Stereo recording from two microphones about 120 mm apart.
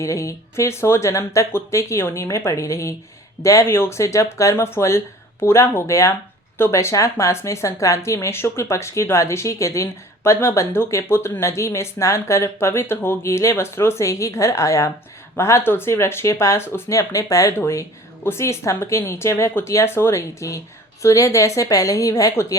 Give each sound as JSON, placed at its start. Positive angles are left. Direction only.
{"t": 0.0, "sound": "speech", "side_deg": 25}